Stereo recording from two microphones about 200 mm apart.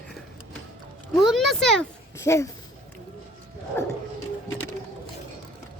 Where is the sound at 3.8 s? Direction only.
10° left (ahead or behind).